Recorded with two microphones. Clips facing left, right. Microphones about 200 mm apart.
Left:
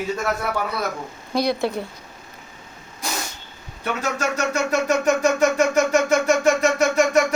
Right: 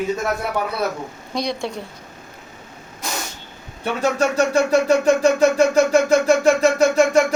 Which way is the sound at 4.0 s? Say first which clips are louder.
Right 7 dB; 30° right (ahead or behind).